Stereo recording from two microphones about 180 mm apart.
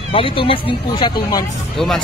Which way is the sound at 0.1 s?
30° left (ahead or behind).